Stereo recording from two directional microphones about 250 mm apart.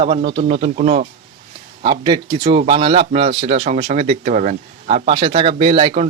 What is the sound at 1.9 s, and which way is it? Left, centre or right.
A man's voice, centre.